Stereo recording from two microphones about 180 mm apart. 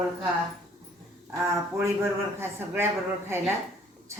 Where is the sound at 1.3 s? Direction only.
15° right (ahead or behind).